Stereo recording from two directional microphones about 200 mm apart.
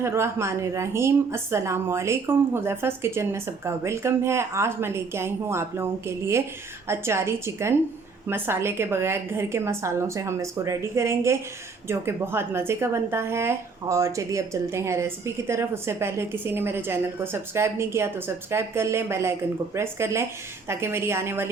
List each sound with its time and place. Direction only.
0.0 s a woman's voice: 15° right (ahead or behind)